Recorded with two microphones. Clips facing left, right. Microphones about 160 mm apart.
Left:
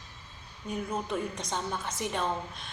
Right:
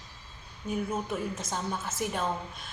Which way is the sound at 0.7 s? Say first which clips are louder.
Right 1 dB; 5° right (ahead or behind).